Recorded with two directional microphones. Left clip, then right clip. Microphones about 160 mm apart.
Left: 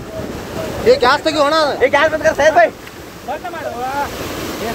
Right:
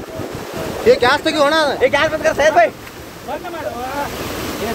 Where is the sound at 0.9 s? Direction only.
20° right (ahead or behind).